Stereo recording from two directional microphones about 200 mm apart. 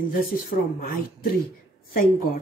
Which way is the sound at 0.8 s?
45° left (ahead or behind).